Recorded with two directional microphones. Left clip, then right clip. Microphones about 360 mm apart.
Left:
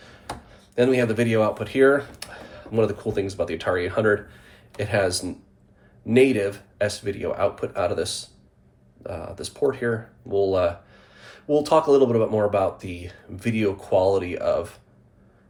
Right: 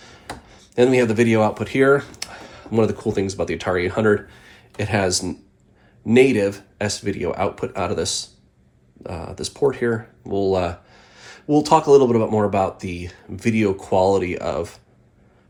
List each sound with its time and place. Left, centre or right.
0.4 s speech: centre